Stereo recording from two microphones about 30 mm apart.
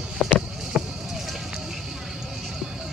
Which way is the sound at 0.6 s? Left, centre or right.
Centre.